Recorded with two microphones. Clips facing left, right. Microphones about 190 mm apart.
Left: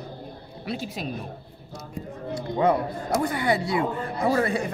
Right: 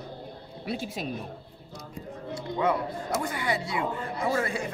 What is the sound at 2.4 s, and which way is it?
Speech, 35° left (ahead or behind).